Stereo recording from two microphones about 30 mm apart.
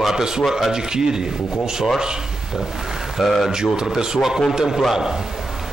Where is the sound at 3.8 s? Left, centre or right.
Right.